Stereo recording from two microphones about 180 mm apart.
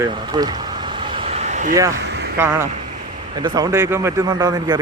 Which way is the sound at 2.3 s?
15° right (ahead or behind).